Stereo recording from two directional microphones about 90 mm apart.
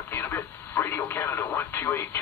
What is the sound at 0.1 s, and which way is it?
Radio, 25° left (ahead or behind).